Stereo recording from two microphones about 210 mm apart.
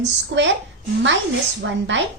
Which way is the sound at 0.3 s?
60° right (ahead or behind).